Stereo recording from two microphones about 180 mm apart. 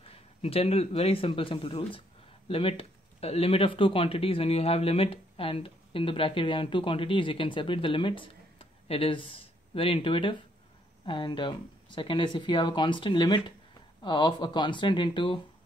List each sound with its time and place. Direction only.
0.0 s a man's voice: 35° left (ahead or behind)